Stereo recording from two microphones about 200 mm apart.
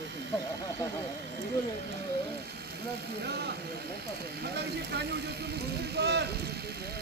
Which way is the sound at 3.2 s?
55° right (ahead or behind).